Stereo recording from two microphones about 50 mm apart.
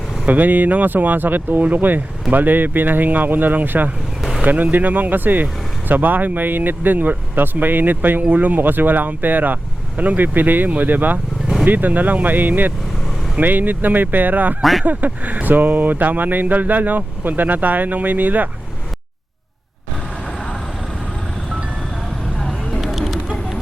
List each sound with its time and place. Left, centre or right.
0.3 s speech: right
4.2 s vehicle: centre
4.4 s speech: right
14.6 s speech: centre
14.8 s speech: right
22.3 s vehicle: centre
22.7 s a sound: centre